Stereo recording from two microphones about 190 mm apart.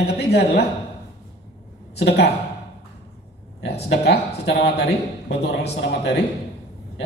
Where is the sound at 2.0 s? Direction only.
60° left (ahead or behind).